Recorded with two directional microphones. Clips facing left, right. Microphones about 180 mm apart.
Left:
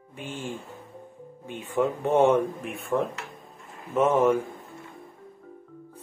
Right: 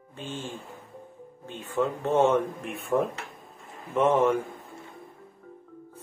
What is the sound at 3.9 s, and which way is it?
Speech, 10° left (ahead or behind).